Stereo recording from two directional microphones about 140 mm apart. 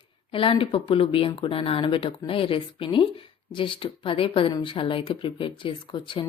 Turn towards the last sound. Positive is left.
turn(degrees=35)  # may be behind; listen again after turning